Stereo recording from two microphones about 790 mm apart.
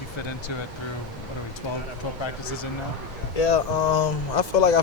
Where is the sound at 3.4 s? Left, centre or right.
Left.